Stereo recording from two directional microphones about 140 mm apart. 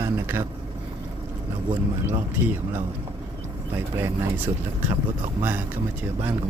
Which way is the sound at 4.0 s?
10° right (ahead or behind).